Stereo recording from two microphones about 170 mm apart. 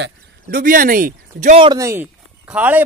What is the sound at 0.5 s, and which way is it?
Speech, 55° right (ahead or behind).